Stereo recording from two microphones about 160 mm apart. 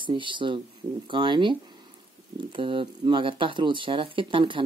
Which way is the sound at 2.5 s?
30° right (ahead or behind).